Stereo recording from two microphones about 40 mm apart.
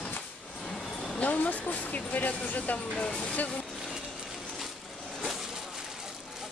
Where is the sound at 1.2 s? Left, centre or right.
Left.